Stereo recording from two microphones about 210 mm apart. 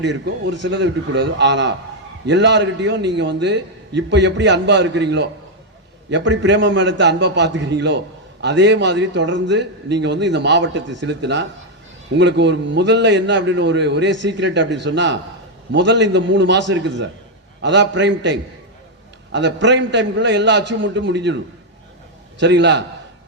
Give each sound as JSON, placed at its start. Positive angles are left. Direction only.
{"t": 0.0, "sound": "a man's voice", "side_deg": -60}